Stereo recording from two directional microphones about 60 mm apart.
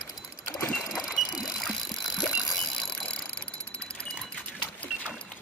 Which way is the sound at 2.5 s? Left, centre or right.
Centre.